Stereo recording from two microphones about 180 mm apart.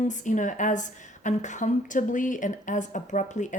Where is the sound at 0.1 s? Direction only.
45° left (ahead or behind).